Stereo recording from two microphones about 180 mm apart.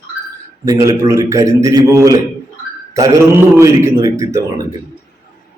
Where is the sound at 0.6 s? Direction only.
20° right (ahead or behind).